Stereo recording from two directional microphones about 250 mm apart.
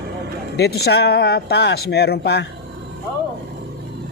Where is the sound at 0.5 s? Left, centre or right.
Left.